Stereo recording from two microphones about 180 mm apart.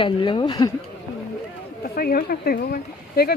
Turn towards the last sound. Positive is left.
turn(degrees=60)  # may be behind; listen again after turning